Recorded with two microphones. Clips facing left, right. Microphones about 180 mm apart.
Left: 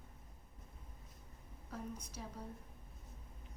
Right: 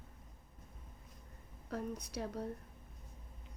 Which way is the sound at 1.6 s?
70° right (ahead or behind).